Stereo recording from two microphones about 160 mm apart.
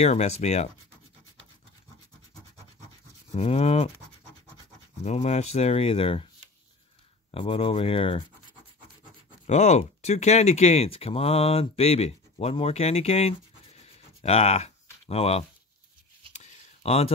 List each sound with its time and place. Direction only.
0.0 s speech: 45° left (ahead or behind)
3.3 s speech: 40° left (ahead or behind)
5.0 s speech: 45° left (ahead or behind)
7.2 s speech: 35° left (ahead or behind)
9.5 s speech: 45° left (ahead or behind)
13.8 s a sound: 40° left (ahead or behind)